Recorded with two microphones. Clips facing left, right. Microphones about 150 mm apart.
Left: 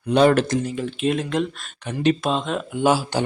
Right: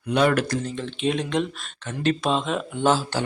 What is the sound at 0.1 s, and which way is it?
Speech, 30° left (ahead or behind).